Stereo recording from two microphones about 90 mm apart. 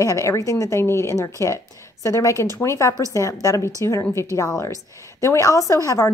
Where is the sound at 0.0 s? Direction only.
35° left (ahead or behind).